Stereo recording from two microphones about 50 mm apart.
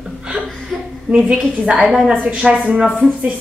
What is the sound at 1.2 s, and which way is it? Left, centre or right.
Speech, centre.